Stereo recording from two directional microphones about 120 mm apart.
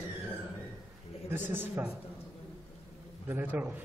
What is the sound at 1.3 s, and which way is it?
Speech, 20° right (ahead or behind).